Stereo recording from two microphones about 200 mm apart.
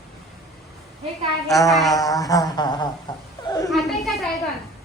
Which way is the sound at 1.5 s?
15° left (ahead or behind).